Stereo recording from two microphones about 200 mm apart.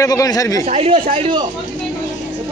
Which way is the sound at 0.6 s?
30° right (ahead or behind).